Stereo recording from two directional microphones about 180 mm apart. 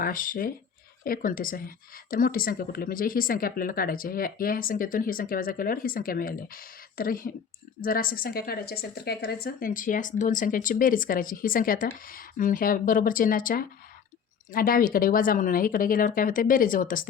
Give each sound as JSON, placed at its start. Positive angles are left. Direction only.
{"t": 0.0, "sound": "speech", "side_deg": 50}